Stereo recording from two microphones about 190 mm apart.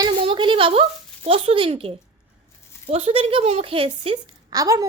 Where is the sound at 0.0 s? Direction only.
25° right (ahead or behind).